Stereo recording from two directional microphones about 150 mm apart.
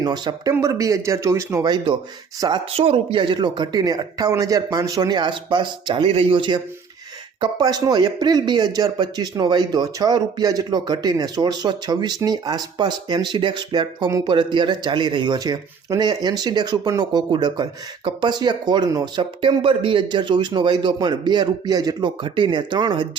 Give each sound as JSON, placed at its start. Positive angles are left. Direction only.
{"t": 0.0, "sound": "speech", "side_deg": -30}
{"t": 2.7, "sound": "speech", "side_deg": -40}